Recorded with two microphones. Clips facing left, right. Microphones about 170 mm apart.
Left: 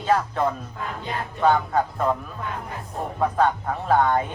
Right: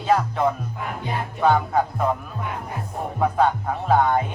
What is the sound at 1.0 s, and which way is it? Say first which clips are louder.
Music: right 1 dB; 5° right (ahead or behind).